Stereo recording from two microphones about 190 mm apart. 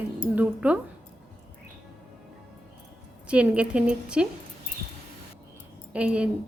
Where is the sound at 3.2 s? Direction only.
5° right (ahead or behind).